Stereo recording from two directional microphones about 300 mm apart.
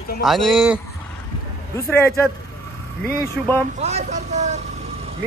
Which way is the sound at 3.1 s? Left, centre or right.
Centre.